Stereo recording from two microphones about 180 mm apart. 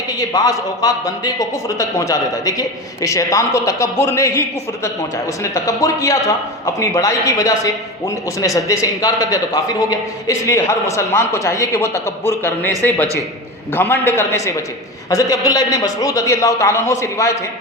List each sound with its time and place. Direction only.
0.2 s a man's voice: 20° left (ahead or behind)
13.7 s a man's voice: 15° left (ahead or behind)